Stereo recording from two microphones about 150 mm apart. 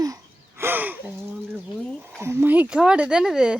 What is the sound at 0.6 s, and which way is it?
Speech, 15° right (ahead or behind).